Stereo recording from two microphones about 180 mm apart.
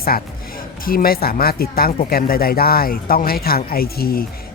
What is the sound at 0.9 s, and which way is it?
Speech, 55° left (ahead or behind).